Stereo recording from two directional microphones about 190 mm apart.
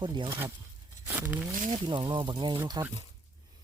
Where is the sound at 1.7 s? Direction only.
25° right (ahead or behind).